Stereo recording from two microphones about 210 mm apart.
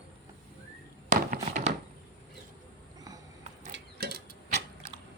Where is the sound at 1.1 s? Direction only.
35° right (ahead or behind).